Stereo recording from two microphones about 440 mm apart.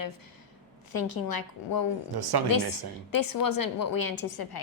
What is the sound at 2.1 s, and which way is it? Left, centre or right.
Speech, right.